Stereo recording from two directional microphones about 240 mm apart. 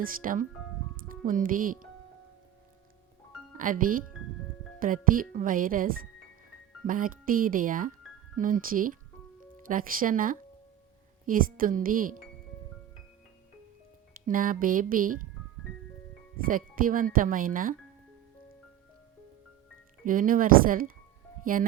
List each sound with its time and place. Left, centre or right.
0.0 s speech: right
3.6 s speech: right
14.3 s speech: right
16.4 s speech: right
20.1 s speech: right